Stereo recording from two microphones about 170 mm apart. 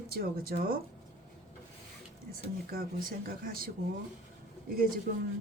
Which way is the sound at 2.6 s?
60° right (ahead or behind).